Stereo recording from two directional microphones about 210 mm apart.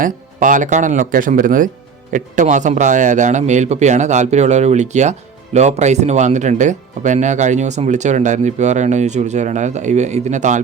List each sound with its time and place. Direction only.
0.0 s speech: 40° right (ahead or behind)